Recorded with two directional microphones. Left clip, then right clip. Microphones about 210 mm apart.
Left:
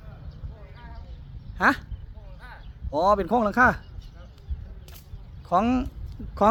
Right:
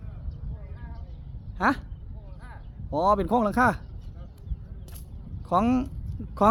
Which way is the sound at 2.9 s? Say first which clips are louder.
Left 1 dB; 5° right (ahead or behind).